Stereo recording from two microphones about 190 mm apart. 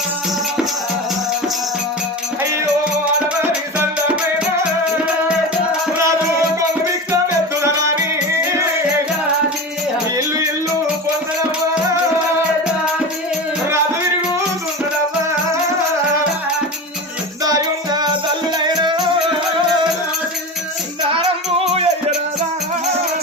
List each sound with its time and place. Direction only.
10.2 s music: 15° right (ahead or behind)
17.4 s music: 20° right (ahead or behind)
21.6 s music: 35° right (ahead or behind)